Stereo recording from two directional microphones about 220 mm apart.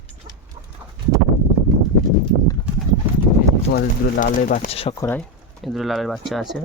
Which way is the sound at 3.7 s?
40° left (ahead or behind).